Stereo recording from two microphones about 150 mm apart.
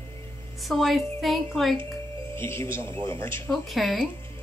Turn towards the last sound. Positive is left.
turn(degrees=0)  # may be behind; listen again after turning